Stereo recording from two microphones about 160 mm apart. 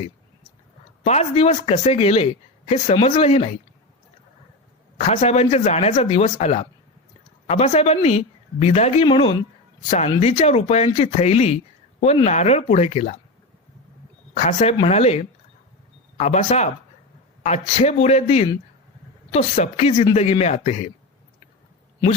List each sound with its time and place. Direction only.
1.0 s speech: 45° left (ahead or behind)
4.9 s speech: 45° left (ahead or behind)
10.2 s speech: 40° left (ahead or behind)
14.3 s speech: 40° left (ahead or behind)